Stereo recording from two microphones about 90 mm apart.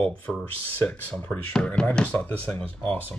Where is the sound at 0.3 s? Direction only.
5° right (ahead or behind).